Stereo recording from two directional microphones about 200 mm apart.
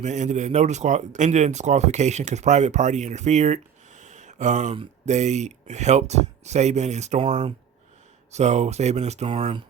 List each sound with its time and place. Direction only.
0.0 s speech: 35° right (ahead or behind)